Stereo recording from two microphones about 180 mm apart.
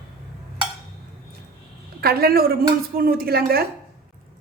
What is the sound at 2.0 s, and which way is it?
A woman's voice, 60° right (ahead or behind).